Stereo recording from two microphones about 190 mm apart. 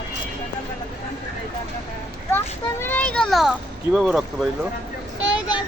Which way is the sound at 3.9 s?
Centre (ahead or behind).